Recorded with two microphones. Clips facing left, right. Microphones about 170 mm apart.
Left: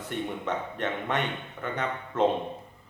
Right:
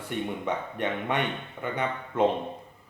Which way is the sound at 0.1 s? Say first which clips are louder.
Right 1 dB; 10° right (ahead or behind).